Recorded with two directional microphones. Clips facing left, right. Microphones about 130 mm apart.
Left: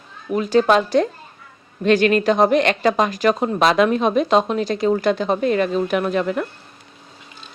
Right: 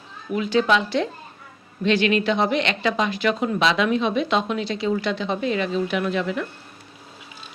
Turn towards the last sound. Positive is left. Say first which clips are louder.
# left 4 dB
turn(degrees=45)  # may be behind; listen again after turning